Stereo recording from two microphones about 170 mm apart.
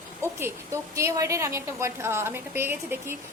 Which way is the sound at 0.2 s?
15° right (ahead or behind).